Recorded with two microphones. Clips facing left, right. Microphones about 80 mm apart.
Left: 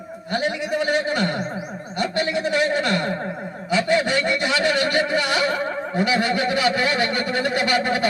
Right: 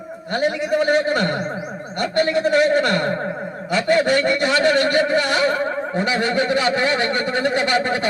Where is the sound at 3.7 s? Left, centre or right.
Right.